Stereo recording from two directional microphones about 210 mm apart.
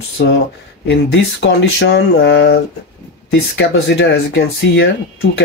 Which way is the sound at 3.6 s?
55° left (ahead or behind).